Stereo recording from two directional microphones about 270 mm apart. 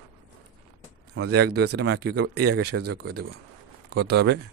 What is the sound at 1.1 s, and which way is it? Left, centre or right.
Speech, right.